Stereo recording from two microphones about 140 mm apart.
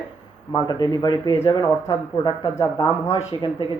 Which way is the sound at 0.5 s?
30° left (ahead or behind).